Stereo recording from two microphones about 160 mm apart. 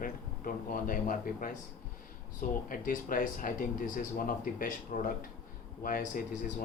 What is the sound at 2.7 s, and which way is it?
Speech, 60° left (ahead or behind).